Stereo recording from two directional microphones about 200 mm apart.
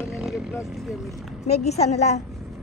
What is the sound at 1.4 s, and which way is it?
Speech, 35° left (ahead or behind).